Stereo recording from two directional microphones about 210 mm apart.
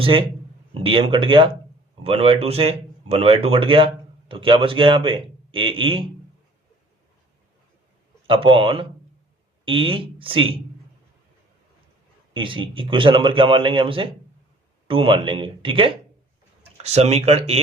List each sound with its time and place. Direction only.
0.0 s speech: 25° right (ahead or behind)
8.3 s speech: 25° right (ahead or behind)
12.3 s speech: 25° right (ahead or behind)